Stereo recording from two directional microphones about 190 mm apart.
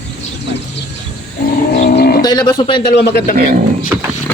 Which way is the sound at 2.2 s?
20° left (ahead or behind).